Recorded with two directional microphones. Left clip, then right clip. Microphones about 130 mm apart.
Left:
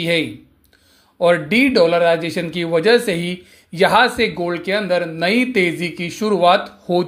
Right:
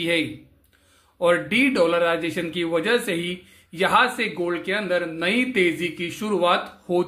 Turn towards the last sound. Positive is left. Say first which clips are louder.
# left 6 dB
turn(degrees=35)  # may be behind; listen again after turning